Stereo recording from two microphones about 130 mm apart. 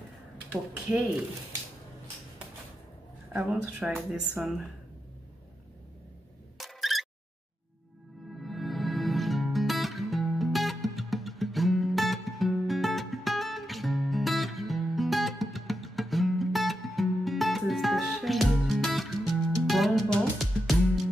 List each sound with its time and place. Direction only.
0.5 s speech: 10° right (ahead or behind)
3.3 s speech: 10° right (ahead or behind)
6.6 s a sound: centre (ahead or behind)
8.4 s music: centre (ahead or behind)